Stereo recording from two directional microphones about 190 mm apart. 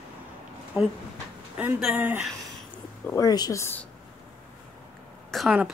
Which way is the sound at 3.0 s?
15° left (ahead or behind).